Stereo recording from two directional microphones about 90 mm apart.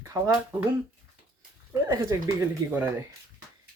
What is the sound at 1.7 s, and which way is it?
Speech, 35° right (ahead or behind).